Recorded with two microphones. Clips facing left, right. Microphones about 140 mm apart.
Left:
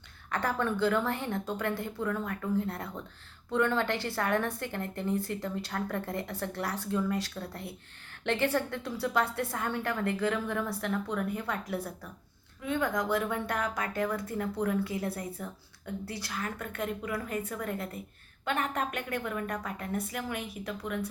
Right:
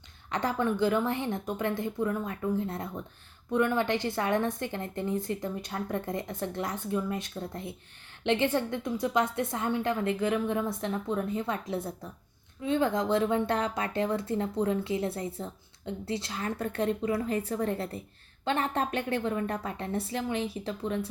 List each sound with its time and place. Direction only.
0.3 s a woman's voice: 20° right (ahead or behind)